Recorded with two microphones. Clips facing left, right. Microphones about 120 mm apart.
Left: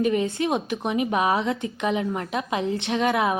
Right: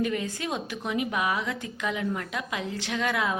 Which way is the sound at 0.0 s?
20° left (ahead or behind).